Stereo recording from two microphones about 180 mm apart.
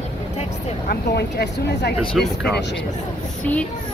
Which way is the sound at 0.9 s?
70° left (ahead or behind).